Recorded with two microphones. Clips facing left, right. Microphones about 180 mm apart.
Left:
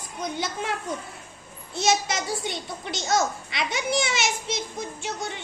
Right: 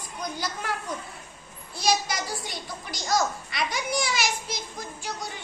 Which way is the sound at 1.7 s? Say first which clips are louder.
Left 2 dB; 25° left (ahead or behind).